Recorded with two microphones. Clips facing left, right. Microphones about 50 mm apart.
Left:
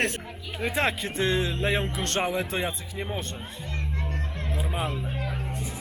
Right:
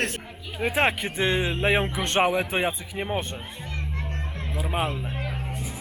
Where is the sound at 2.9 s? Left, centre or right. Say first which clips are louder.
Right 4 dB; right.